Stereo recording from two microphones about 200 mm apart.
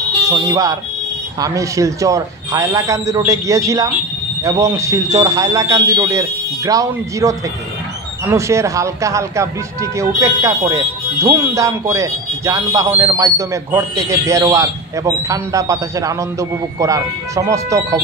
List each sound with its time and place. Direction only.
0.3 s speech: 15° right (ahead or behind)